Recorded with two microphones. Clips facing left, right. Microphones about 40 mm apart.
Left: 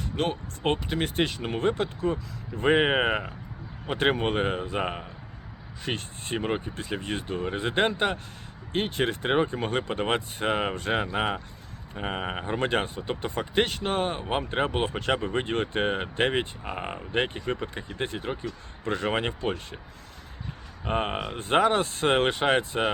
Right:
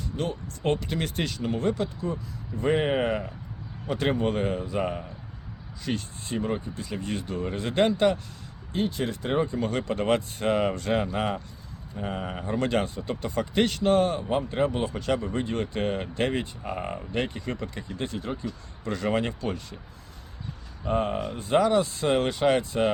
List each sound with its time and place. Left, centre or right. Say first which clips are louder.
0.2 s speech: left 3 dB; left
0.9 s speech: left 3 dB; left
8.7 s speech: left 1 dB; left
11.9 s speech: left 1 dB; left
14.2 s speech: right 1 dB; left
20.8 s speech: right 2 dB; left